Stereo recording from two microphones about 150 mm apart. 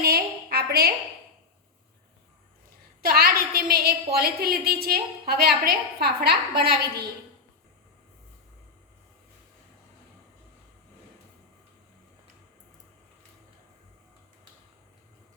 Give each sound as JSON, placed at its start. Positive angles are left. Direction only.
{"t": 0.5, "sound": "a woman's voice", "side_deg": -90}
{"t": 3.0, "sound": "a woman's voice", "side_deg": -90}